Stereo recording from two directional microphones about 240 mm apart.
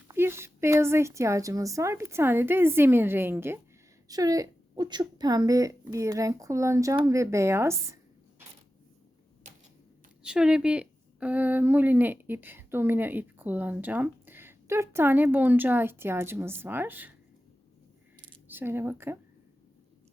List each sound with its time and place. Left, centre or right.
0.1 s a woman's voice: centre
10.2 s a woman's voice: centre
18.4 s a woman's voice: centre